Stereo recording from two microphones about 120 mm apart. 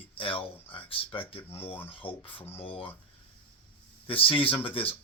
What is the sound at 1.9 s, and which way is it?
Speech, 50° left (ahead or behind).